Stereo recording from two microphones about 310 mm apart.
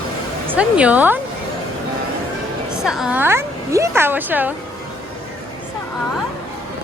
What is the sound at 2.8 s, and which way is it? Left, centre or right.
A woman's voice, centre.